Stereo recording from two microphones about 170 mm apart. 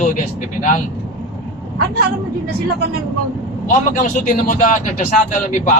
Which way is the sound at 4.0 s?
50° left (ahead or behind).